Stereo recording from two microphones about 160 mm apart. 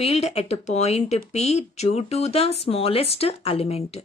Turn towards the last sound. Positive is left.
turn(degrees=40)  # may be behind; listen again after turning